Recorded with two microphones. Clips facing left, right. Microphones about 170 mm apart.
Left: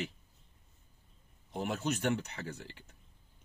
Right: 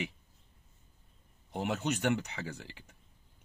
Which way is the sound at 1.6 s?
65° right (ahead or behind).